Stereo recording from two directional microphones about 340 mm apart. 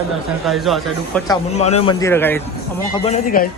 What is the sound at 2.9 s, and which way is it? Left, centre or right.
Speech, centre.